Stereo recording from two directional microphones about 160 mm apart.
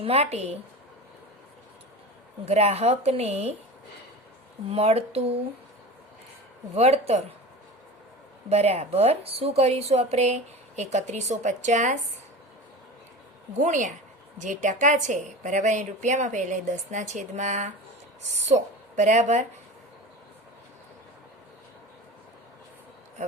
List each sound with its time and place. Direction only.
0.0 s a woman's voice: 40° right (ahead or behind)
2.4 s a woman's voice: 40° right (ahead or behind)
4.7 s a woman's voice: 40° right (ahead or behind)
6.7 s a woman's voice: 40° right (ahead or behind)
8.4 s a woman's voice: 40° right (ahead or behind)
13.6 s a woman's voice: 50° right (ahead or behind)